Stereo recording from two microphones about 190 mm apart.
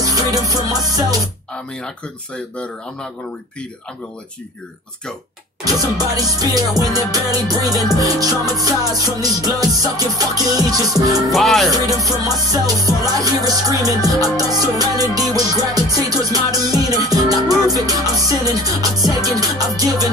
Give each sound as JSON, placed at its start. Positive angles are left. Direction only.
{"t": 0.0, "sound": "music", "side_deg": -20}
{"t": 2.3, "sound": "speech", "side_deg": 5}
{"t": 5.6, "sound": "music", "side_deg": -20}
{"t": 11.3, "sound": "speech", "side_deg": 0}
{"t": 11.7, "sound": "music", "side_deg": -20}